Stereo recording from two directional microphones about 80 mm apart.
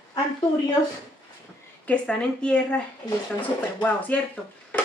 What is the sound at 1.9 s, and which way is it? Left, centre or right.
Speech, centre.